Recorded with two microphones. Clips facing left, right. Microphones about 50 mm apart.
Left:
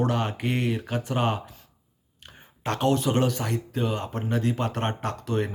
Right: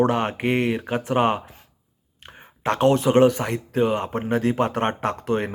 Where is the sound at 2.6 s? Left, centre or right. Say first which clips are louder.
Right 5 dB; right.